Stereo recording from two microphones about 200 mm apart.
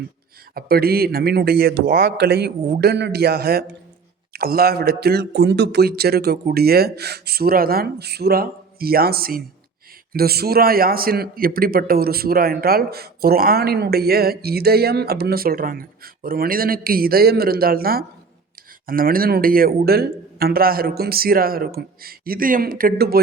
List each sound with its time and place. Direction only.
0.5 s a man's voice: 50° right (ahead or behind)